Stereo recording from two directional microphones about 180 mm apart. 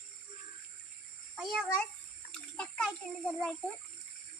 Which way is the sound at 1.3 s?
Centre (ahead or behind).